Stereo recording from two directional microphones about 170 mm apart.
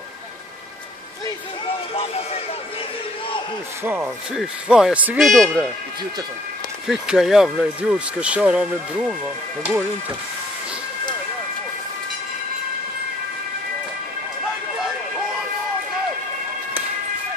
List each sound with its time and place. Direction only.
2.0 s speech: 35° left (ahead or behind)
3.8 s speech: 10° right (ahead or behind)
6.9 s speech: centre (ahead or behind)